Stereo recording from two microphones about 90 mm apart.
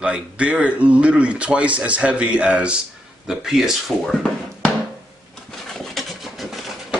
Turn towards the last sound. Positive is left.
turn(degrees=0)  # may be behind; listen again after turning